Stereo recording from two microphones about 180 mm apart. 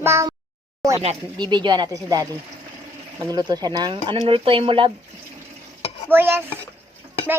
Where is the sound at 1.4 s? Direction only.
25° right (ahead or behind).